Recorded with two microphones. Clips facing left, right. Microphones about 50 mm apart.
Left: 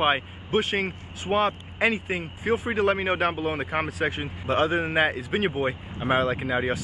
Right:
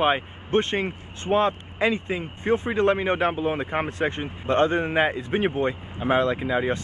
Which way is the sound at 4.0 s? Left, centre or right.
Centre.